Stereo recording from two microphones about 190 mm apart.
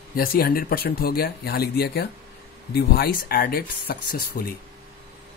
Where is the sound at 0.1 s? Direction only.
50° left (ahead or behind).